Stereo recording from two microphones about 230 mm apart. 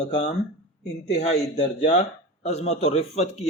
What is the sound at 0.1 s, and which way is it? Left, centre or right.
Speech, left.